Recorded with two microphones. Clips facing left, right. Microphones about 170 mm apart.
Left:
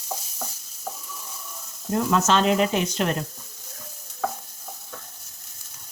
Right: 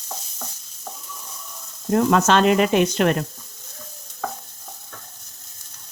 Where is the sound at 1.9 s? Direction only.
65° right (ahead or behind).